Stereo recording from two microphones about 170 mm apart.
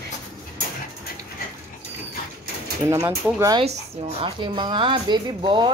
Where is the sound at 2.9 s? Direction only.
15° right (ahead or behind).